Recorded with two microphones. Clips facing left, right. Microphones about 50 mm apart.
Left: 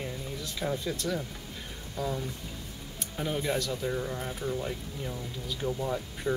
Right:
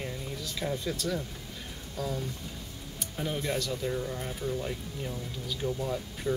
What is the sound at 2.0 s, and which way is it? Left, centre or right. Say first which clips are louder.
Speech: left 2 dB; centre.